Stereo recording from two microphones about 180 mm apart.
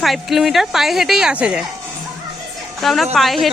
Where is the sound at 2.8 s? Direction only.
Centre (ahead or behind).